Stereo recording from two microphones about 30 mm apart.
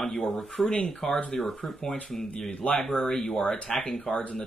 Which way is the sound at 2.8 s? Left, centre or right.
Centre.